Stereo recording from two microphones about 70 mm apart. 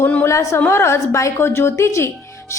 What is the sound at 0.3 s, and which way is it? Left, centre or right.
A woman's voice, left.